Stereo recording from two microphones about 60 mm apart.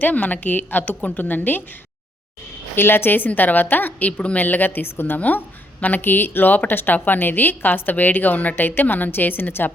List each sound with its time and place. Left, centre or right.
0.0 s a woman's voice: left
2.7 s a woman's voice: left